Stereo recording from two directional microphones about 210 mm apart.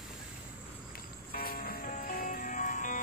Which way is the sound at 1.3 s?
45° left (ahead or behind).